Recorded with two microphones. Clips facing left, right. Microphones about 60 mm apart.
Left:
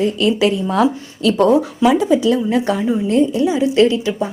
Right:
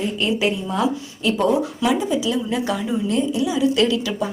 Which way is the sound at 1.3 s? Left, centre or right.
Left.